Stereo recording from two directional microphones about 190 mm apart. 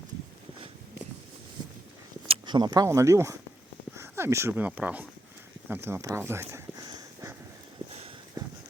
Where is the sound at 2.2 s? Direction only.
25° right (ahead or behind); by 5.0 s 10° right (ahead or behind).